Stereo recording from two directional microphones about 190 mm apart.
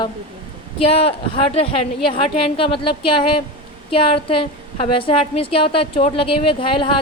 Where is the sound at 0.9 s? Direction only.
30° left (ahead or behind).